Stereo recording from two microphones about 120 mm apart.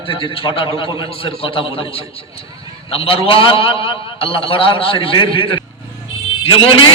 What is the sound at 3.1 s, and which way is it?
A man's voice, 50° left (ahead or behind).